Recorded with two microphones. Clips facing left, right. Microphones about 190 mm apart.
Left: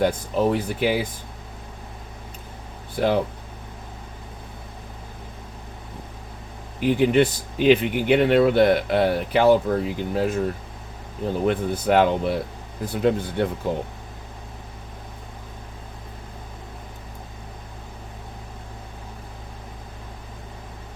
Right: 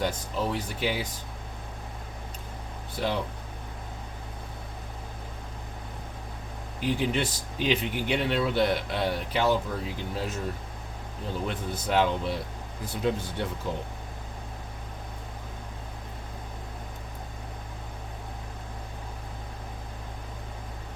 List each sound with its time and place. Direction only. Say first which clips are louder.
0.0 s speech: left 8 dB; 55° left (ahead or behind)
2.9 s speech: left 8 dB; 55° left (ahead or behind)
6.7 s speech: left 9 dB; 60° left (ahead or behind)
11.4 s speech: left 12 dB; 60° left (ahead or behind)